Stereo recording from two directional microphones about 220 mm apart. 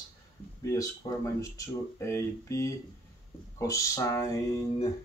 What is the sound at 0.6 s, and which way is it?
Speech, 15° left (ahead or behind).